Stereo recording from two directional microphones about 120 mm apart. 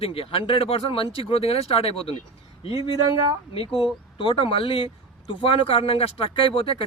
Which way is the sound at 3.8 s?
45° left (ahead or behind).